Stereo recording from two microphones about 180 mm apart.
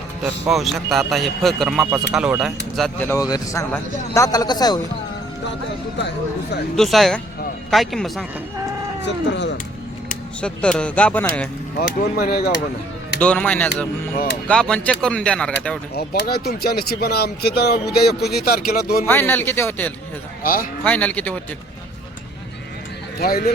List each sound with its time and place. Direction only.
0.4 s a man's voice: centre (ahead or behind)
3.1 s speech: 20° left (ahead or behind)
6.7 s a man's voice: centre (ahead or behind)
9.0 s speech: 80° left
10.4 s speech: 5° left (ahead or behind)
11.8 s speech: 60° left (ahead or behind)
13.1 s a man's voice: 5° left (ahead or behind)
16.0 s speech: 60° left (ahead or behind)
19.0 s speech: 10° left (ahead or behind)
20.4 s speech: 50° left (ahead or behind)
20.8 s speech: 10° left (ahead or behind)
23.2 s speech: 55° left (ahead or behind)